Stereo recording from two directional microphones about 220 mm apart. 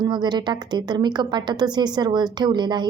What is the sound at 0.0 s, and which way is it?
A woman's voice, 20° right (ahead or behind).